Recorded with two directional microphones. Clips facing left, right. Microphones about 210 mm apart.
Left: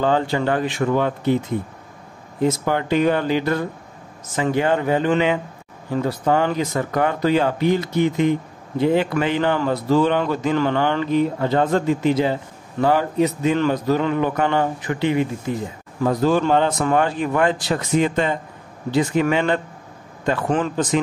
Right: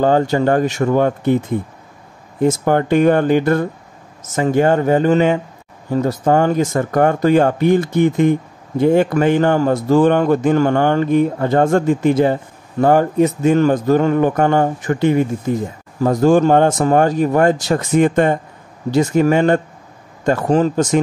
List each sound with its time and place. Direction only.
0.0 s speech: 45° right (ahead or behind)
2.4 s speech: 50° right (ahead or behind)